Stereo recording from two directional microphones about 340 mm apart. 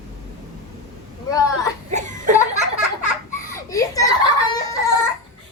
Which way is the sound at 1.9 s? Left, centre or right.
Right.